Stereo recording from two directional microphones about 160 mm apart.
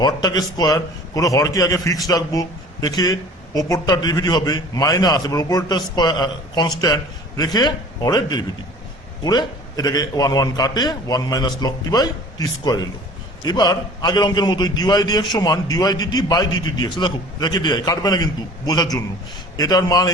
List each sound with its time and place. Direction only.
0.0 s speech: 25° left (ahead or behind)